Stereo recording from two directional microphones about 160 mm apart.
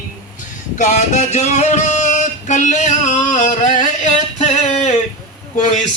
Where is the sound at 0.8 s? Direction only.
50° left (ahead or behind).